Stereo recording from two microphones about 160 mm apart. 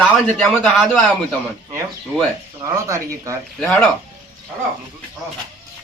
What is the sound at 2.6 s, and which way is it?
Speech, 20° right (ahead or behind).